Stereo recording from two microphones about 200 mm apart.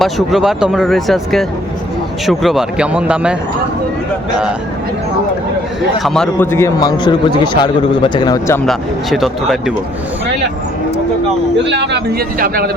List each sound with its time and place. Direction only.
0.0 s speech: centre (ahead or behind)
6.0 s a man's voice: centre (ahead or behind)
8.6 s speech: centre (ahead or behind)
11.5 s a man's voice: 60° right (ahead or behind)